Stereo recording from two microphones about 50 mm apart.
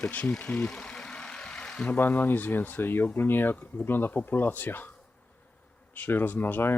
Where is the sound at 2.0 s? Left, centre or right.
Left.